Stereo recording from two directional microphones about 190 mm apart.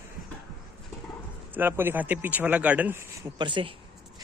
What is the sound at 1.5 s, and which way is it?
Speech, 10° right (ahead or behind).